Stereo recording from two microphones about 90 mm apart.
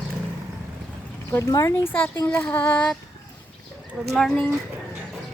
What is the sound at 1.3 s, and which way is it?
Speech, 35° left (ahead or behind).